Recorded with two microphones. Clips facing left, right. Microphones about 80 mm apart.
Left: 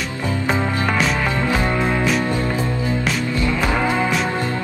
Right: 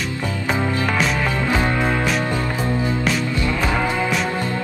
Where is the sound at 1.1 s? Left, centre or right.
Centre.